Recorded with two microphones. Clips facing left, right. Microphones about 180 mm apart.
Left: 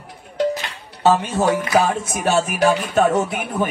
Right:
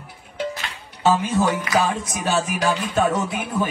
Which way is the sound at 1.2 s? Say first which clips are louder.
Left 2 dB; 60° left (ahead or behind).